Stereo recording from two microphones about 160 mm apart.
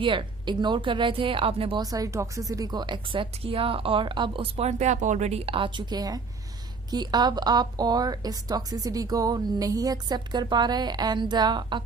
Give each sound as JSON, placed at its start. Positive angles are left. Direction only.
{"t": 0.0, "sound": "speech", "side_deg": -30}
{"t": 1.8, "sound": "a woman's voice", "side_deg": -20}